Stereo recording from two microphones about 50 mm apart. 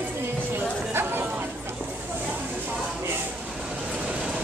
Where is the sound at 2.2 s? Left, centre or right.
Right.